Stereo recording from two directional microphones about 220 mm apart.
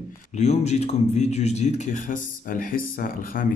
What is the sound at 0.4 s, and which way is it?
Speech, 30° left (ahead or behind).